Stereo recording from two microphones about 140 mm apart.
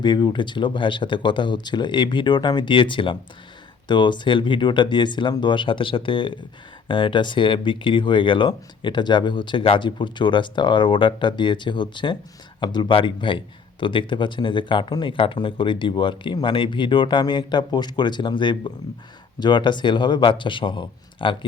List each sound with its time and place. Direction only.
0.0 s a man's voice: 35° left (ahead or behind)